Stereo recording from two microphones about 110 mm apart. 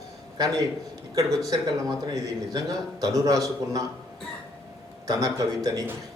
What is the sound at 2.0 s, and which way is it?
A man's voice, 35° right (ahead or behind).